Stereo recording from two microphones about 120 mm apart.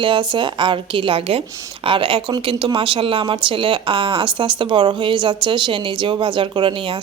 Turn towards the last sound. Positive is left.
turn(degrees=-45)  # may be behind; listen again after turning